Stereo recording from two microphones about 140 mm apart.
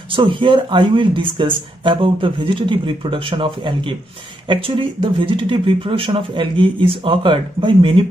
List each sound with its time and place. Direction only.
0.1 s speech: 40° right (ahead or behind)